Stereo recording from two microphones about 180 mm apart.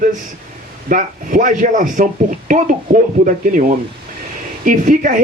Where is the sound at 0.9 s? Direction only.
45° right (ahead or behind).